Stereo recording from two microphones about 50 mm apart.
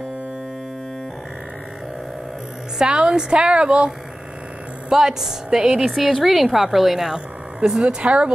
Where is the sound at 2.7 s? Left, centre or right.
Centre.